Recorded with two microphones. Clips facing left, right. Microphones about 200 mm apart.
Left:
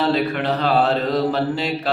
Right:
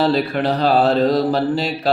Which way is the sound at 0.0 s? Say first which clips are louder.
Right 2 dB; 35° right (ahead or behind).